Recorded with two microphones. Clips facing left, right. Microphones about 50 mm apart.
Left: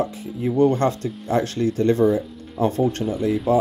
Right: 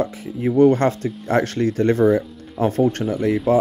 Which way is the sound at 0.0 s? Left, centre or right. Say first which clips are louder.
Right 2 dB; right.